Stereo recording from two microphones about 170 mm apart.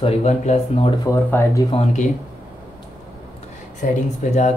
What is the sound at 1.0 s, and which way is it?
Speech, 20° left (ahead or behind).